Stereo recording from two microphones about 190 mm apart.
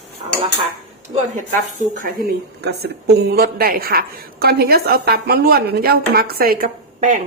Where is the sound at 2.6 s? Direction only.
60° right (ahead or behind).